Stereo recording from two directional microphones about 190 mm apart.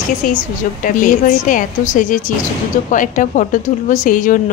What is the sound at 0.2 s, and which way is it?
A woman's voice, 45° left (ahead or behind).